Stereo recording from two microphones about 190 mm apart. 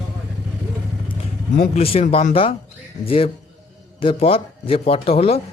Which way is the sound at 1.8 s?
30° left (ahead or behind).